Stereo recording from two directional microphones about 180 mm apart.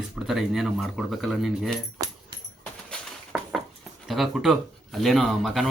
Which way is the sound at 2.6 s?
5° left (ahead or behind).